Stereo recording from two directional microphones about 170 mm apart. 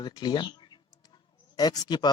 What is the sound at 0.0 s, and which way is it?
Speech, 25° left (ahead or behind).